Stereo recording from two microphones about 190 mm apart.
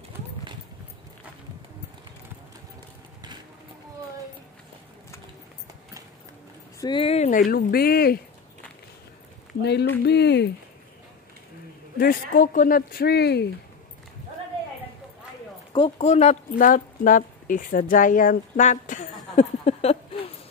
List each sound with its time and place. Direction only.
6.8 s speech: 25° left (ahead or behind); by 8.2 s 55° left (ahead or behind)
9.6 s speech: 60° left (ahead or behind)
12.0 s speech: 50° left (ahead or behind)
15.7 s speech: 30° left (ahead or behind)